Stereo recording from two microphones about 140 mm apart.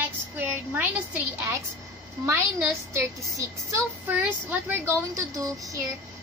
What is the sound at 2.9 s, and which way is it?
Speech, 25° right (ahead or behind).